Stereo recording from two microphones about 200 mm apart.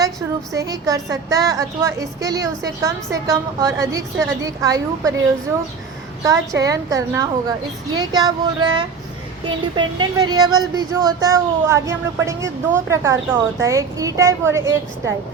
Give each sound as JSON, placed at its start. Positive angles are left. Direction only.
{"t": 0.5, "sound": "speech", "side_deg": -15}
{"t": 6.2, "sound": "speech", "side_deg": -15}